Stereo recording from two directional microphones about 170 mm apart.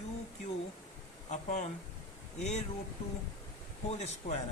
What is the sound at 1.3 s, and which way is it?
Speech, 45° left (ahead or behind).